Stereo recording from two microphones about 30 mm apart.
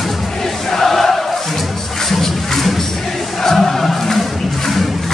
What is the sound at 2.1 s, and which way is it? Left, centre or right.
Music, centre.